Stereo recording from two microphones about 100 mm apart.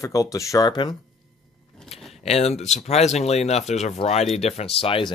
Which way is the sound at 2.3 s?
90° left.